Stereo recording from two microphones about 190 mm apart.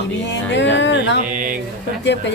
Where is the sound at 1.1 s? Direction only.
45° right (ahead or behind).